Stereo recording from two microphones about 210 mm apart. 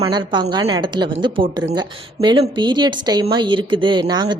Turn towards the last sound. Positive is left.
turn(degrees=-20)  # may be behind; listen again after turning